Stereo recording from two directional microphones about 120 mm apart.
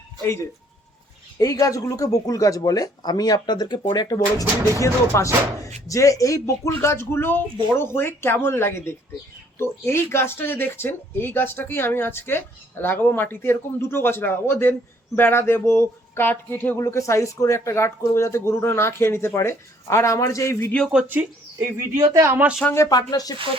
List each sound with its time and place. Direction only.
0.2 s speech: 20° left (ahead or behind)
20.9 s speech: 15° right (ahead or behind)
22.7 s speech: 25° left (ahead or behind)